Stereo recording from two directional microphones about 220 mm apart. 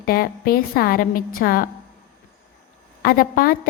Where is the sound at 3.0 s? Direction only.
40° left (ahead or behind).